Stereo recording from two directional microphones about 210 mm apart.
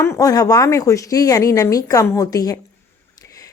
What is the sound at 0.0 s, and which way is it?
Speech, 15° left (ahead or behind).